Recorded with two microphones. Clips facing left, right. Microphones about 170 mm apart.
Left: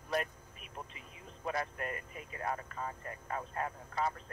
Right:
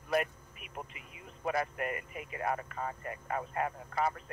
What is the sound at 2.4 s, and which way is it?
Speech, 65° right (ahead or behind).